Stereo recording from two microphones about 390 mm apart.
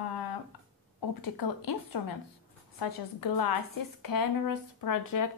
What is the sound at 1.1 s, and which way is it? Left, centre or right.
A woman's voice, left.